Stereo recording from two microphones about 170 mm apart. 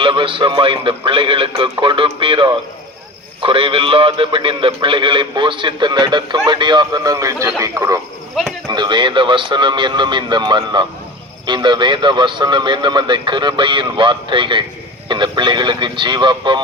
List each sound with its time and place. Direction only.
0.0 s a man's voice: 30° right (ahead or behind)